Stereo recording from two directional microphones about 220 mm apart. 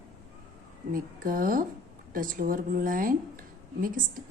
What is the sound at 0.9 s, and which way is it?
Speech, 40° right (ahead or behind).